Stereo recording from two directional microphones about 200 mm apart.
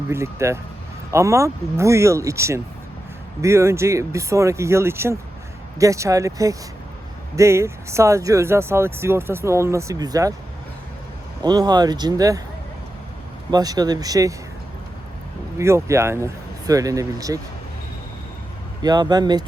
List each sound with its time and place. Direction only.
0.1 s speech: 15° right (ahead or behind)
11.4 s speech: 20° right (ahead or behind)
13.5 s speech: 20° right (ahead or behind)
15.5 s speech: 15° right (ahead or behind)
18.8 s speech: 20° right (ahead or behind)